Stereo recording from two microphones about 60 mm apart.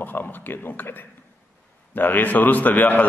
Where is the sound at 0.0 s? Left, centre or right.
Left.